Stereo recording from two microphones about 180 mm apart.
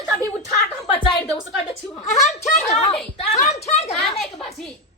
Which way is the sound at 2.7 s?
40° left (ahead or behind).